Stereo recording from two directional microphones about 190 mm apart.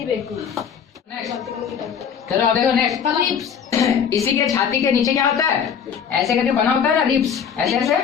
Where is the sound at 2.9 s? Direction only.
Centre (ahead or behind).